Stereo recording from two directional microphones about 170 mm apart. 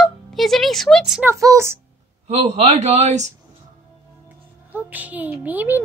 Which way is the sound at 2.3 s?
40° right (ahead or behind).